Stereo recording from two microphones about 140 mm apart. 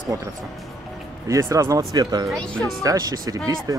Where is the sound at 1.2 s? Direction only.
25° right (ahead or behind).